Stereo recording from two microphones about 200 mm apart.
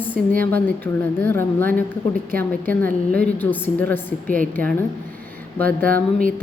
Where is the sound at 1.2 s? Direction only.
10° left (ahead or behind).